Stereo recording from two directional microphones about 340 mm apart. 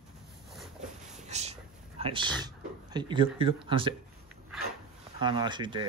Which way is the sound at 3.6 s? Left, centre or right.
Centre.